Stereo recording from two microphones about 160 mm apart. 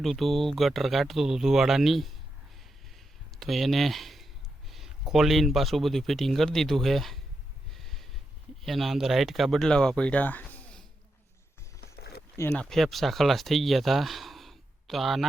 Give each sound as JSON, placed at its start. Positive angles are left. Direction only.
{"t": 0.0, "sound": "speech", "side_deg": 0}
{"t": 3.4, "sound": "speech", "side_deg": 0}
{"t": 7.7, "sound": "snort", "side_deg": 0}
{"t": 8.6, "sound": "speech", "side_deg": 0}
{"t": 11.8, "sound": "a sound", "side_deg": 80}
{"t": 12.4, "sound": "speech", "side_deg": 10}